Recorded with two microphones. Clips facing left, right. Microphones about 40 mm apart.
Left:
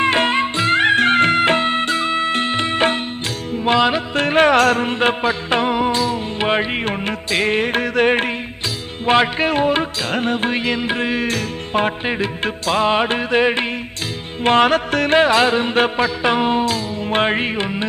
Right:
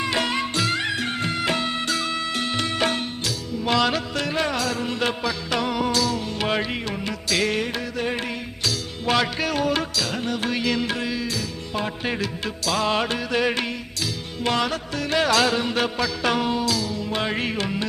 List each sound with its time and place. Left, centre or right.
0.0 s music: left
4.1 s music: left
9.0 s music: left
12.0 s music: left
14.4 s music: left
15.2 s music: left